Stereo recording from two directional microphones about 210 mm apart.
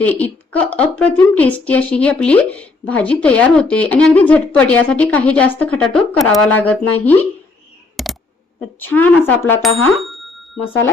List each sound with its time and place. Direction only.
0.0 s a woman's voice: 5° left (ahead or behind)
8.0 s a sound: centre (ahead or behind)
8.8 s a woman's voice: 10° left (ahead or behind)
10.0 s bicycle bell: centre (ahead or behind)